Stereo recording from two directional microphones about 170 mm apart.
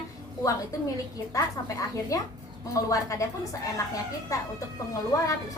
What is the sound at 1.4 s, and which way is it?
A woman's voice, 20° left (ahead or behind).